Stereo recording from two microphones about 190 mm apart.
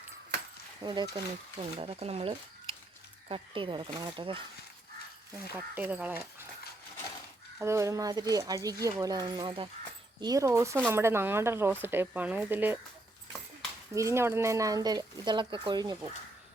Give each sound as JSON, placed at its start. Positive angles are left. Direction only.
{"t": 0.8, "sound": "speech", "side_deg": -25}
{"t": 5.5, "sound": "speech", "side_deg": -10}
{"t": 7.6, "sound": "speech", "side_deg": -15}
{"t": 13.9, "sound": "speech", "side_deg": -15}